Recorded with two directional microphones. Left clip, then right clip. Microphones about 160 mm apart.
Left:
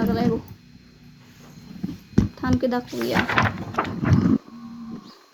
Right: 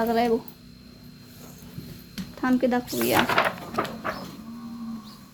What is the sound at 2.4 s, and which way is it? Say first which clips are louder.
Speech: right 3 dB; 5° left (ahead or behind).